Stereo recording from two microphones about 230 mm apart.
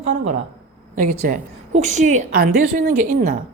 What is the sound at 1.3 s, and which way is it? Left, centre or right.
A woman's voice, right.